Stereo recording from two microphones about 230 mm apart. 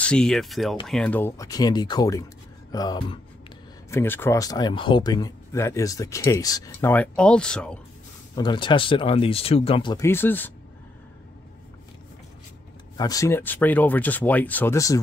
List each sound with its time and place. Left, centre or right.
0.0 s speech: centre
8.4 s speech: left
12.9 s speech: centre